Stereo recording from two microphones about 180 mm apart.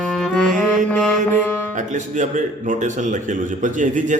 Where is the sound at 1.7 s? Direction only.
45° right (ahead or behind).